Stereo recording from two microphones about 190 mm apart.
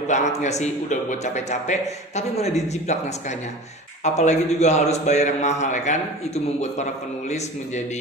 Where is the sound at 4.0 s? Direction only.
35° left (ahead or behind).